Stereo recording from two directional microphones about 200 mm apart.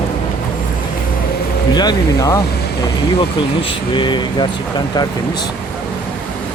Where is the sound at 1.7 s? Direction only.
20° left (ahead or behind).